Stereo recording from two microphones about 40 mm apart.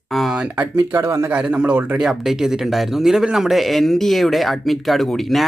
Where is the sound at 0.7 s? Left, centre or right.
Right.